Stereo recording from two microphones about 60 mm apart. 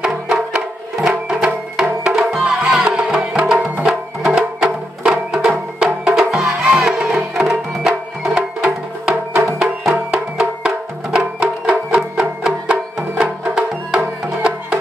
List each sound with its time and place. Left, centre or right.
0.0 s music: centre